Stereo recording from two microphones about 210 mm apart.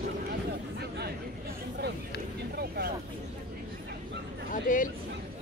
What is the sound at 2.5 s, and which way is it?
Vehicle, 50° right (ahead or behind).